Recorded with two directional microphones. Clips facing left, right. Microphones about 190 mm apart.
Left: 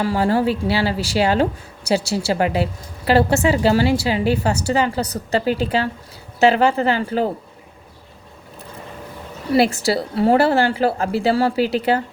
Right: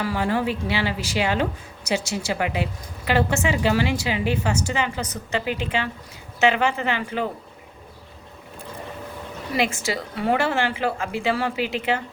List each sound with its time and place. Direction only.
0.0 s a woman's voice: 35° left (ahead or behind)
9.5 s a woman's voice: 35° left (ahead or behind)